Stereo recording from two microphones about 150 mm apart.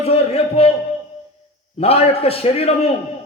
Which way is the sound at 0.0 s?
40° left (ahead or behind).